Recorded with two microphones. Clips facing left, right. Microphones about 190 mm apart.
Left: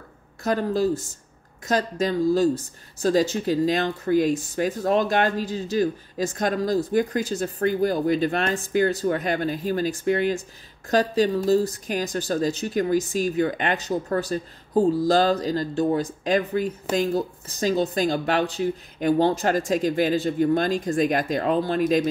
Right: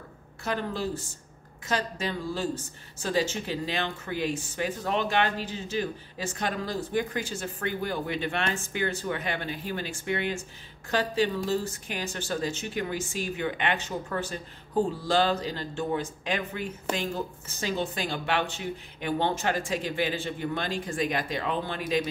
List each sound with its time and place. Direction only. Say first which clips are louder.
0.4 s speech: left 8 dB; 40° left (ahead or behind)